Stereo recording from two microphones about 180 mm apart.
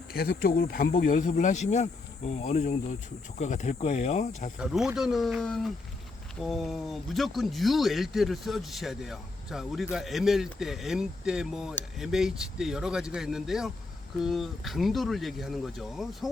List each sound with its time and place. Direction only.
0.1 s speech: 55° left (ahead or behind); by 4.5 s 40° left (ahead or behind)
4.5 s speech: 5° right (ahead or behind)